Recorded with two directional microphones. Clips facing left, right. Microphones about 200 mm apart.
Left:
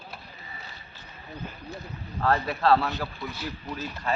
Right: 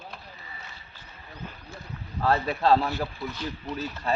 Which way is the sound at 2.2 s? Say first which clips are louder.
Right 1 dB; 15° right (ahead or behind).